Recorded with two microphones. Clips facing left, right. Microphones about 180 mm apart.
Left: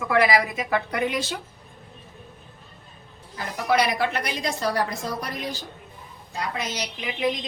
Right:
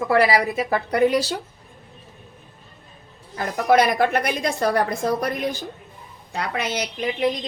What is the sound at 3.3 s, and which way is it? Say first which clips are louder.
A woman's voice: right 5 dB; 50° right (ahead or behind).